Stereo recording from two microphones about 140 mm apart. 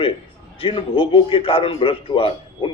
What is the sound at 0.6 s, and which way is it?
A man's voice, 40° left (ahead or behind).